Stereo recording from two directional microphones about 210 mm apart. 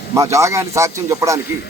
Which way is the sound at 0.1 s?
15° right (ahead or behind).